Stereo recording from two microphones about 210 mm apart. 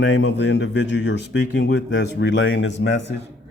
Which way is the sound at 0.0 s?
60° left (ahead or behind).